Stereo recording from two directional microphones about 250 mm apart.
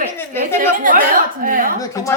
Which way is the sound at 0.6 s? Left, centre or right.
Right.